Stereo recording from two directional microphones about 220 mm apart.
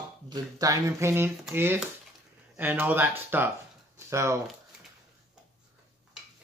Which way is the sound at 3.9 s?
10° right (ahead or behind).